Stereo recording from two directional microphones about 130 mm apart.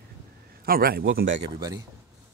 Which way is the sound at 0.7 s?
90° right.